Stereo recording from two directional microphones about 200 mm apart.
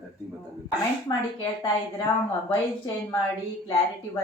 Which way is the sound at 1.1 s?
20° left (ahead or behind).